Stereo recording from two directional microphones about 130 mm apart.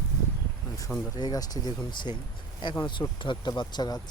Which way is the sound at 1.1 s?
30° left (ahead or behind).